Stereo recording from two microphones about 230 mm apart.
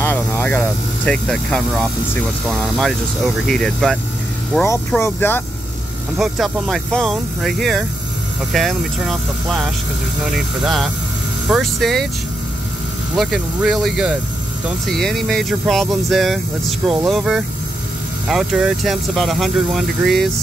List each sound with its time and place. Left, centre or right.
0.0 s speech: centre
6.1 s speech: centre
13.1 s speech: centre